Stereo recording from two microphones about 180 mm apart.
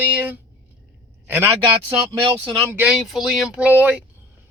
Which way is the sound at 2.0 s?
25° right (ahead or behind).